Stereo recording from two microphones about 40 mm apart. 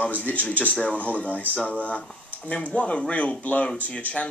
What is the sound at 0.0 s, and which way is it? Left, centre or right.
Speech, left.